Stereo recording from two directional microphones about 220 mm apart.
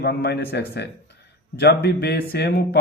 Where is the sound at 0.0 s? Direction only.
45° left (ahead or behind).